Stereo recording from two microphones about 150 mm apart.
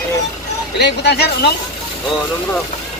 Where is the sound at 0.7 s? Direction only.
90° left.